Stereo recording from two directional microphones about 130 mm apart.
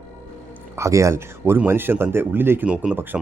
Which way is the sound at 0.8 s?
25° right (ahead or behind).